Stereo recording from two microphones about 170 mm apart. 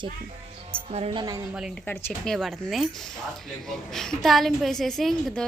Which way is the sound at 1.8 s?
10° left (ahead or behind).